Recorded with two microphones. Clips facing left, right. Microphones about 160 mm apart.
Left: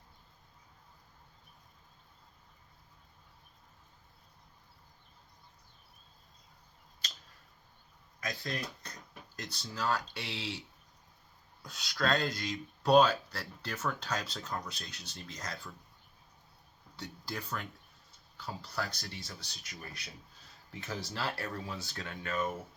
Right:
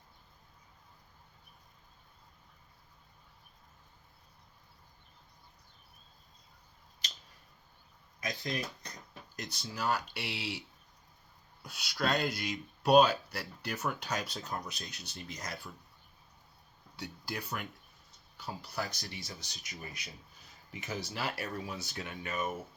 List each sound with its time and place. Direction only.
8.2 s speech: 20° right (ahead or behind)
11.6 s speech: 10° right (ahead or behind)
17.0 s speech: 10° right (ahead or behind)